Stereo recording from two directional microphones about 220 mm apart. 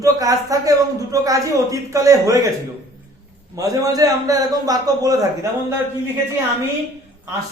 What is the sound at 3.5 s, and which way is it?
Speech, 15° right (ahead or behind).